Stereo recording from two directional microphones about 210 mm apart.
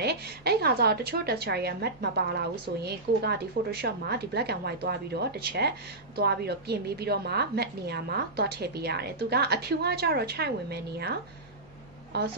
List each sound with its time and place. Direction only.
0.0 s a woman's voice: 50° right (ahead or behind)